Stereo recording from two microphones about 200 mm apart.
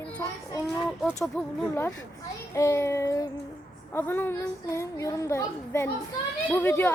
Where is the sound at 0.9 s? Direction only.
Centre (ahead or behind).